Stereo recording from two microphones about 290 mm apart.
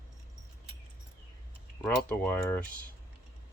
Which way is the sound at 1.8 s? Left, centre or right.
Centre.